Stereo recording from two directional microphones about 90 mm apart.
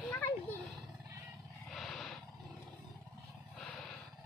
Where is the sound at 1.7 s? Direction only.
Centre (ahead or behind).